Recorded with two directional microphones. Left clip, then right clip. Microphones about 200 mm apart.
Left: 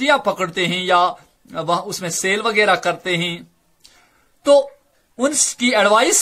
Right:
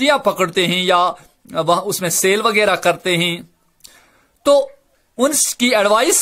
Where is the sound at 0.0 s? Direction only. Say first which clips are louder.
Right 2 dB; 40° right (ahead or behind).